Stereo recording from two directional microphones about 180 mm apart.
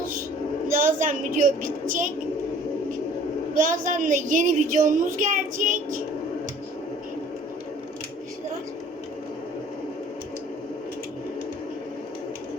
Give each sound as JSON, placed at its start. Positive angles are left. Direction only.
{"t": 0.8, "sound": "a sound", "side_deg": -45}
{"t": 1.9, "sound": "a woman's voice", "side_deg": -45}
{"t": 3.5, "sound": "a woman's voice", "side_deg": -50}